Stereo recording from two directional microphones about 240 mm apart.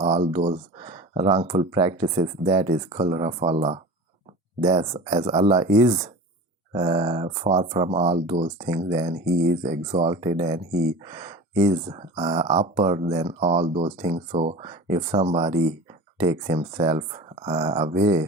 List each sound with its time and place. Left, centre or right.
0.0 s speech: right
4.8 s speech: right
5.3 s speech: centre